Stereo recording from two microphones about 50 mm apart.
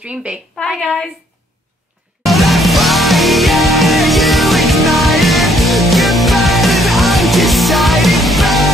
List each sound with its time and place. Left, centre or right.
0.0 s a woman's voice: right
2.2 s music: centre